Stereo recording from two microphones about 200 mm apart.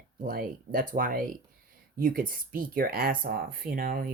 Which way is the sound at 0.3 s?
45° right (ahead or behind).